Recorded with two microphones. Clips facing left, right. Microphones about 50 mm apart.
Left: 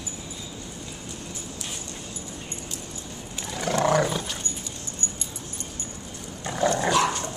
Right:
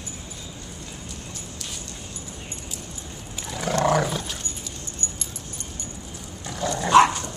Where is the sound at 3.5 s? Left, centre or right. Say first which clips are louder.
Right 1 dB; centre.